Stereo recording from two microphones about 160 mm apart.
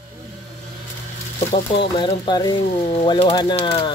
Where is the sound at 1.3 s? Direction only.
30° left (ahead or behind).